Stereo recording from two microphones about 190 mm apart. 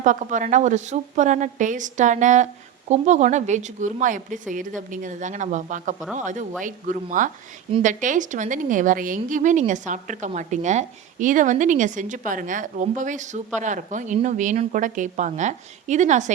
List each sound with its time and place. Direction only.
0.0 s a woman's voice: 40° right (ahead or behind)